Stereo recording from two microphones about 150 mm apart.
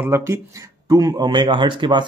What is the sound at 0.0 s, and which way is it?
Speech, 15° right (ahead or behind).